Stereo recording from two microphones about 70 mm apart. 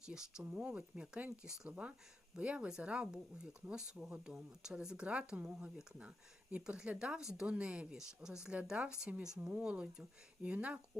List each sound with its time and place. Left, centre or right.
0.0 s speech: centre